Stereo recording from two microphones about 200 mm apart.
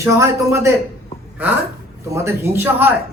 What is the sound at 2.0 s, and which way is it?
Speech, 15° right (ahead or behind).